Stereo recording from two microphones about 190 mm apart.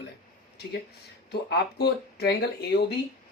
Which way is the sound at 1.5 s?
60° left (ahead or behind).